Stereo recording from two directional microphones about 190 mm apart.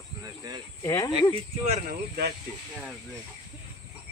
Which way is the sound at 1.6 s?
50° right (ahead or behind).